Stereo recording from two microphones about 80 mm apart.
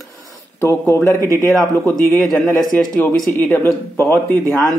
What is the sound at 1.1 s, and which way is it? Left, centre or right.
Speech, right.